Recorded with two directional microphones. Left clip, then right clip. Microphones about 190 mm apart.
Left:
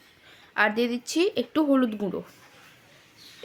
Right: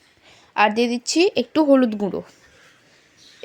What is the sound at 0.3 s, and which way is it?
Speech, 25° right (ahead or behind).